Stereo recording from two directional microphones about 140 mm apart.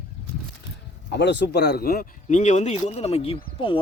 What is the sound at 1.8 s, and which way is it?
Speech, 90° left.